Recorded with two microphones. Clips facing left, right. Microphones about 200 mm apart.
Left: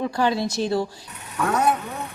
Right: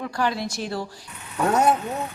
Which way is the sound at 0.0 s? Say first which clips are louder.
Left 4 dB; 25° left (ahead or behind).